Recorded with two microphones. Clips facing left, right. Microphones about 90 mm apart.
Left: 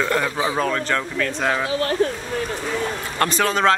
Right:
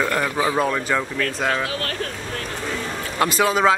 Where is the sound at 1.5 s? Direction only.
25° left (ahead or behind).